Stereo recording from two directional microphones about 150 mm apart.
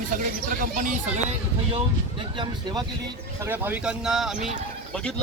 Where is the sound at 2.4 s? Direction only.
30° right (ahead or behind).